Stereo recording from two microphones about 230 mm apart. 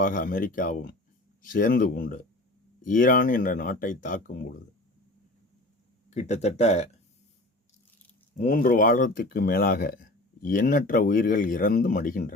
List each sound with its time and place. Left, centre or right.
0.0 s speech: left
6.1 s speech: left
8.4 s speech: left